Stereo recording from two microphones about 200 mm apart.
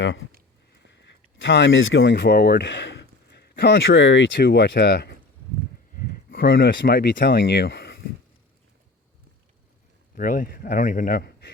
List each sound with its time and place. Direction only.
0.3 s a sound: 50° right (ahead or behind)
0.9 s speech: 60° left (ahead or behind)
5.9 s a sound: 45° left (ahead or behind)
6.4 s speech: 65° left (ahead or behind)
6.7 s speech: 50° left (ahead or behind)
10.2 s speech: 40° left (ahead or behind)